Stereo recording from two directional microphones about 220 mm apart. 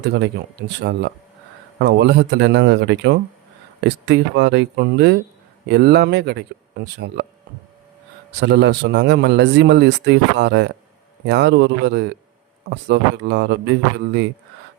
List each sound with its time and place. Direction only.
0.0 s a man's voice: 50° right (ahead or behind)
8.4 s a man's voice: 50° right (ahead or behind)